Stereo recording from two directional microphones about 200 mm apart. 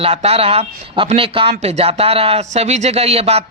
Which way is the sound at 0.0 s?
30° right (ahead or behind).